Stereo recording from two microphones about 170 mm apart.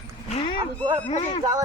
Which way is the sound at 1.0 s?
40° left (ahead or behind).